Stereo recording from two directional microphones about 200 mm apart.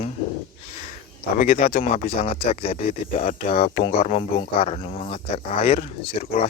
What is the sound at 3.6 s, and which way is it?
Speech, 30° left (ahead or behind).